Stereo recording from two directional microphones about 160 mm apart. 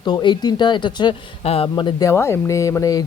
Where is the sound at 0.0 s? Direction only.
25° left (ahead or behind).